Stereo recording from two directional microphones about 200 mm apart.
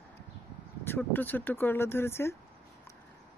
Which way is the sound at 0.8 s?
10° left (ahead or behind).